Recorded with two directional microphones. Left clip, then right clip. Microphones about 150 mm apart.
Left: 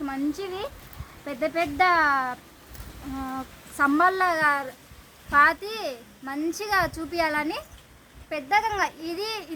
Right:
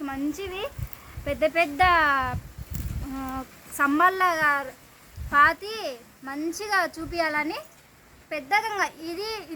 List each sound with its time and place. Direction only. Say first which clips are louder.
0.0 s speech: left 1 dB; 30° right (ahead or behind)
1.2 s speech: right 3 dB; 50° right (ahead or behind)
3.8 s speech: even; 30° right (ahead or behind)
4.2 s a child's voice: even; 15° right (ahead or behind); by 9.5 s centre (ahead or behind)